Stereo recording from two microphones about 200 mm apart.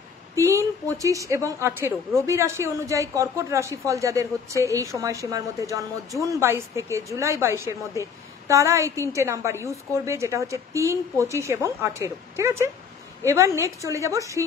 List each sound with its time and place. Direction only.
0.4 s speech: 15° right (ahead or behind)